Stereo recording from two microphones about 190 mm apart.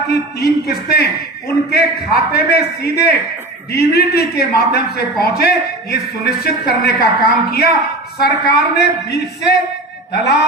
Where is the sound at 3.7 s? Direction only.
55° left (ahead or behind).